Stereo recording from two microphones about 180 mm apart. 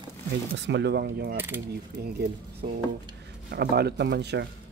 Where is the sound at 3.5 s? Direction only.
60° right (ahead or behind).